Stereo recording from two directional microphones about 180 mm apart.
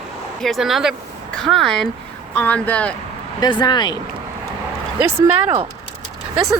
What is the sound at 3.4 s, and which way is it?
Speech, 25° left (ahead or behind).